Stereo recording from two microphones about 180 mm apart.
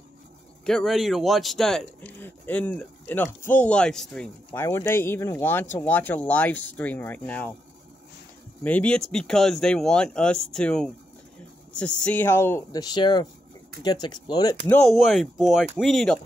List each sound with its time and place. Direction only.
0.7 s speech: centre (ahead or behind)
4.6 s speech: 15° left (ahead or behind)
8.6 s speech: 5° left (ahead or behind); by 14.6 s 20° left (ahead or behind)
14.7 s speech: centre (ahead or behind)